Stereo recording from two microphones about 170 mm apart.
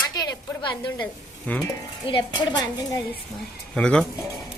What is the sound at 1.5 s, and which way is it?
Speech, 10° left (ahead or behind).